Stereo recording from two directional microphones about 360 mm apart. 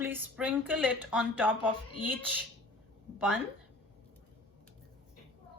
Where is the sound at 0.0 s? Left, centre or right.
Centre.